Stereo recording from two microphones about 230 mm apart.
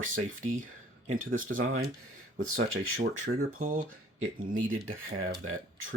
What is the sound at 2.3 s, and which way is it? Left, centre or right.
Speech, right.